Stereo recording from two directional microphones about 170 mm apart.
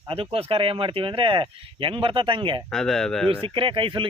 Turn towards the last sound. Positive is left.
turn(degrees=-30)  # may be behind; listen again after turning